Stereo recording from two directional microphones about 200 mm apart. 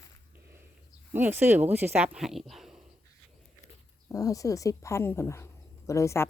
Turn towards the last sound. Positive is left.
turn(degrees=15)  # may be behind; listen again after turning